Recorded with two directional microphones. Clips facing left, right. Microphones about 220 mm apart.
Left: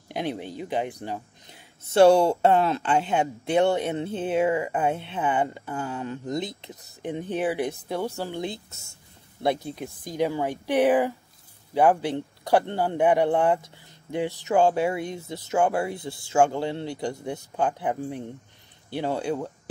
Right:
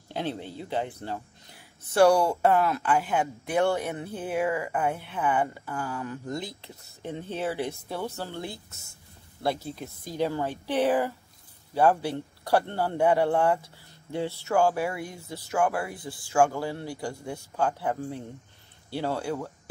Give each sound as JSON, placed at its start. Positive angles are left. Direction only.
{"t": 0.1, "sound": "a man's voice", "side_deg": 15}